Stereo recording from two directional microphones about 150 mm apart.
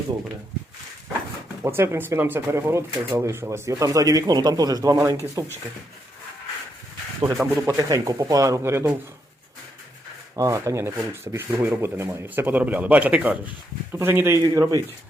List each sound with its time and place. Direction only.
1.6 s speech: 15° right (ahead or behind)
7.3 s speech: 10° right (ahead or behind)
7.7 s speech: 20° right (ahead or behind)
10.3 s speech: 20° right (ahead or behind)